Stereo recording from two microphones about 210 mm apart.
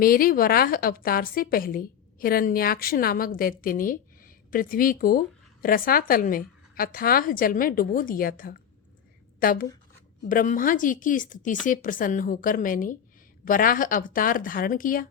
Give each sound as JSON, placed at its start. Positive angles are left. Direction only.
{"t": 0.0, "sound": "a woman's voice", "side_deg": 45}